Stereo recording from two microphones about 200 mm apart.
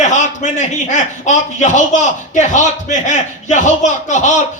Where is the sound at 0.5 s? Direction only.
35° left (ahead or behind).